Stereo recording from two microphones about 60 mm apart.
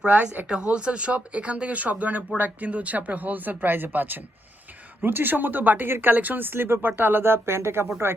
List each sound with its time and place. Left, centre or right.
0.0 s speech: centre; by 7.9 s right